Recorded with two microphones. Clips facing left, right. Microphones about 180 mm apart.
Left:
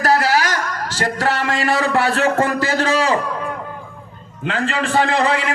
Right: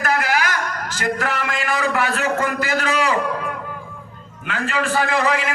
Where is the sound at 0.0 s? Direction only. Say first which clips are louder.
Left 4 dB; 35° left (ahead or behind).